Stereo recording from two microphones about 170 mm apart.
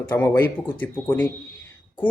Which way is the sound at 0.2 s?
10° left (ahead or behind).